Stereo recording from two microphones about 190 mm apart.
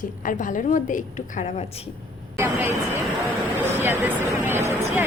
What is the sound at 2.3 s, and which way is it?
Speech, 10° right (ahead or behind).